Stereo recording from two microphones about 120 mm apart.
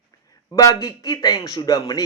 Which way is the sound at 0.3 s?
30° left (ahead or behind).